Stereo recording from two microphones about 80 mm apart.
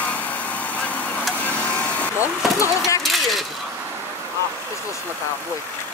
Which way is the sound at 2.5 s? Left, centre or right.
Left.